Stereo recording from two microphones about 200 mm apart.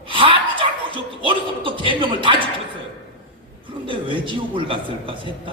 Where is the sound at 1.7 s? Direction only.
25° right (ahead or behind).